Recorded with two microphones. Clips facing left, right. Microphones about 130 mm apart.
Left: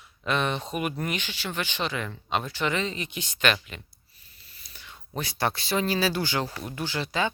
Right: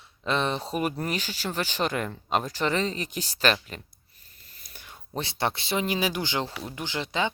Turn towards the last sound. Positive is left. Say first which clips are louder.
# left 1 dB
turn(degrees=-20)  # may be behind; listen again after turning